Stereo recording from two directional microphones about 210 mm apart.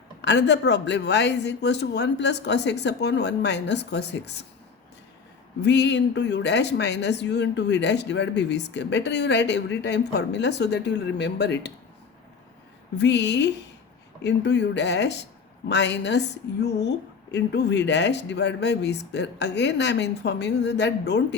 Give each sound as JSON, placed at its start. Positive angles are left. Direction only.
{"t": 0.2, "sound": "speech", "side_deg": 55}
{"t": 5.6, "sound": "speech", "side_deg": 55}
{"t": 13.0, "sound": "speech", "side_deg": 55}